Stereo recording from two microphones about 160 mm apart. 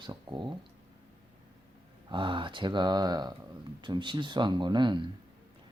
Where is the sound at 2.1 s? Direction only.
30° right (ahead or behind).